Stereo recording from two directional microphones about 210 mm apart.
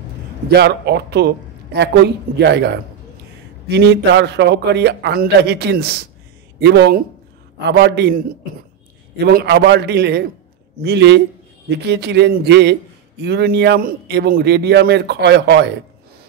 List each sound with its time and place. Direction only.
0.5 s a man's voice: 50° right (ahead or behind)